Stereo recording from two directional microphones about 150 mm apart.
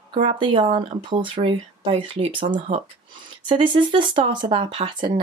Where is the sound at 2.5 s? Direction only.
45° right (ahead or behind).